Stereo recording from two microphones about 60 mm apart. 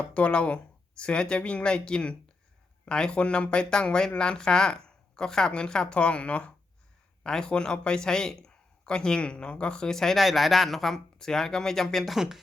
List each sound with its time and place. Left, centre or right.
0.1 s speech: centre